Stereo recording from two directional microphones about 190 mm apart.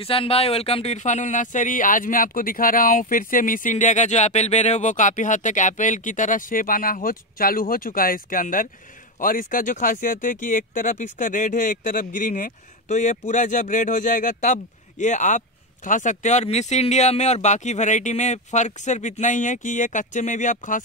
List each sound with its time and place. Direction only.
0.0 s speech: 30° left (ahead or behind)